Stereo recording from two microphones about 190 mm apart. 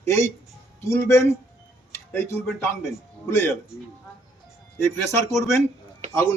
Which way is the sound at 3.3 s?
10° left (ahead or behind).